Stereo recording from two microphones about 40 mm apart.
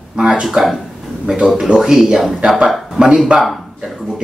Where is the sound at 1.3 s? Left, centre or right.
Right.